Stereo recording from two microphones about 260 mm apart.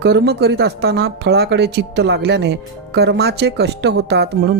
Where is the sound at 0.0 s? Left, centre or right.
Right.